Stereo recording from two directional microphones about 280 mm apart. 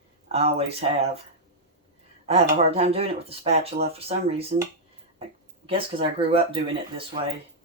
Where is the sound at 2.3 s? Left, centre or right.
Right.